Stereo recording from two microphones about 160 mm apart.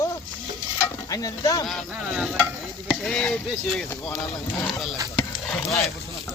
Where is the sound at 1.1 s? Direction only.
20° left (ahead or behind).